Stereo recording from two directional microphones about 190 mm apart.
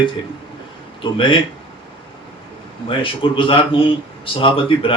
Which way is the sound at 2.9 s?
25° left (ahead or behind).